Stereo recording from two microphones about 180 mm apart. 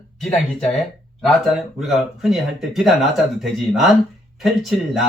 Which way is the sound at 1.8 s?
Centre (ahead or behind).